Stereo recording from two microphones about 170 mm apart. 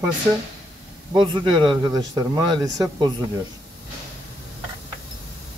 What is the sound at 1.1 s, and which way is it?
Speech, 30° right (ahead or behind).